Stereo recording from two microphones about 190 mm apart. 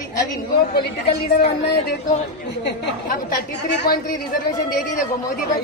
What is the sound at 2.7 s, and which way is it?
Speech, 55° left (ahead or behind).